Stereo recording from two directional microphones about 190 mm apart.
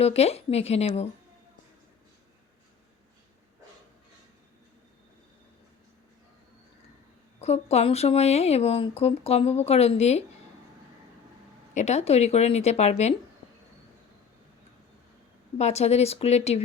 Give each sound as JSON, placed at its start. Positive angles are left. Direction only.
{"t": 0.0, "sound": "speech", "side_deg": 35}
{"t": 7.4, "sound": "speech", "side_deg": 35}
{"t": 11.7, "sound": "speech", "side_deg": 35}
{"t": 15.5, "sound": "speech", "side_deg": 35}